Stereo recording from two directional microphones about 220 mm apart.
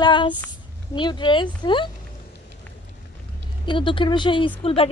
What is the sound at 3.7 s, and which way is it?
Speech, 20° left (ahead or behind).